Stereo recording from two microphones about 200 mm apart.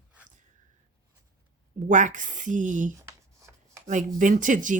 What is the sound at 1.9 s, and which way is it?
A woman's voice, 40° right (ahead or behind).